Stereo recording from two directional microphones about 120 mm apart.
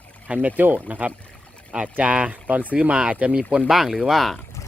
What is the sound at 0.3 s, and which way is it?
Speech, 10° right (ahead or behind).